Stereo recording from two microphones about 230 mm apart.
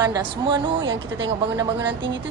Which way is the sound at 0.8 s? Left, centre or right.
Right.